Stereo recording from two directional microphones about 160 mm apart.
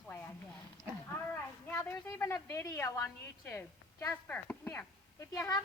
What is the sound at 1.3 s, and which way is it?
A woman's voice, 15° left (ahead or behind).